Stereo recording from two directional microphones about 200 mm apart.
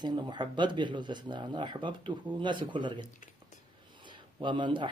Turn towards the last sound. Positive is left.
turn(degrees=-25)  # may be behind; listen again after turning